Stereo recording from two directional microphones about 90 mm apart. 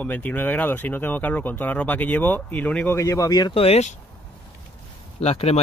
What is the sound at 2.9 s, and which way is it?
Speech, 35° left (ahead or behind).